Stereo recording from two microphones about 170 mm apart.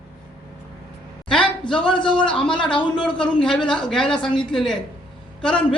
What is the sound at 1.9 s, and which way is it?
Speech, 30° left (ahead or behind).